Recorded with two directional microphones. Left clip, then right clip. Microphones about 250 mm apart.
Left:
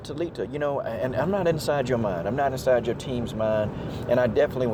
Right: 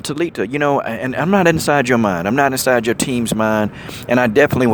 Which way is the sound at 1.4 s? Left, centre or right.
Right.